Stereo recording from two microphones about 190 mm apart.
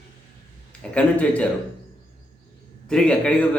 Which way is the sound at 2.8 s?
5° left (ahead or behind).